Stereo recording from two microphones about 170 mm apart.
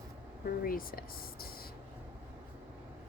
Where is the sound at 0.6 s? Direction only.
55° left (ahead or behind).